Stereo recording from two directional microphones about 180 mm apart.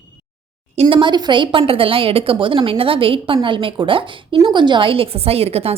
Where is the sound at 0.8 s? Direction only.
25° right (ahead or behind).